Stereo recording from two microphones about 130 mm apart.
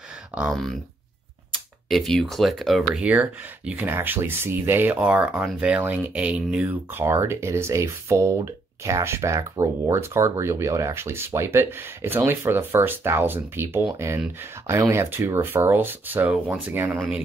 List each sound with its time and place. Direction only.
0.3 s speech: 10° right (ahead or behind)
1.9 s speech: centre (ahead or behind); by 16.9 s 15° right (ahead or behind)
16.9 s speech: centre (ahead or behind)